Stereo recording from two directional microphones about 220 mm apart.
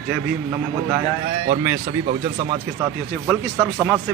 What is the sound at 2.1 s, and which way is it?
Speech, 25° right (ahead or behind).